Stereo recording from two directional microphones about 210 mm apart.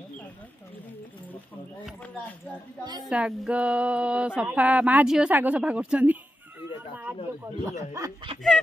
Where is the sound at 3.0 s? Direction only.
5° right (ahead or behind).